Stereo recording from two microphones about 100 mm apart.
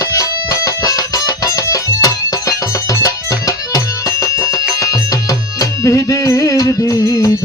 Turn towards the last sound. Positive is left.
turn(degrees=35)  # may be behind; listen again after turning